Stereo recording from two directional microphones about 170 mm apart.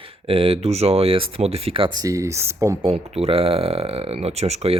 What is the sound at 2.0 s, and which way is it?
Speech, 20° right (ahead or behind).